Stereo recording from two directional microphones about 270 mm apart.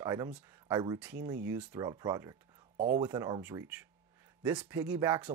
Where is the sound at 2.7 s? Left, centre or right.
Right.